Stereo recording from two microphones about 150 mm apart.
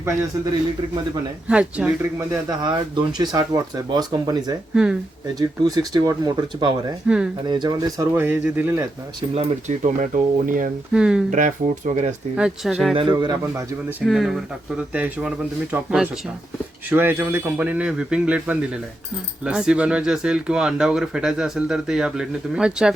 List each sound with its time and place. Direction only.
1.5 s speech: 5° right (ahead or behind)
2.6 s speech: 30° right (ahead or behind)
4.7 s speech: 5° right (ahead or behind)
5.3 s speech: 25° right (ahead or behind)
8.2 s speech: 10° right (ahead or behind)
9.3 s speech: 45° right (ahead or behind); by 10.7 s 65° right (ahead or behind)
10.9 s speech: 5° right (ahead or behind)
11.3 s speech: 55° right (ahead or behind)
12.4 s speech: 5° right (ahead or behind)
12.9 s speech: 35° right (ahead or behind)
13.1 s speech: 20° right (ahead or behind)
14.0 s speech: centre (ahead or behind)